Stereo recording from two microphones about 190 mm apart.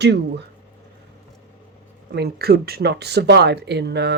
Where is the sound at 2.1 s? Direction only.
55° right (ahead or behind).